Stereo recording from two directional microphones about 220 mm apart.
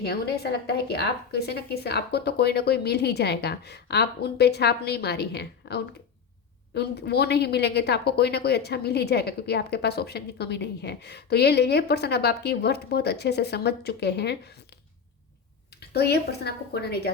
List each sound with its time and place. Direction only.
0.0 s a woman's voice: 45° left (ahead or behind)
15.8 s a woman's voice: 45° left (ahead or behind)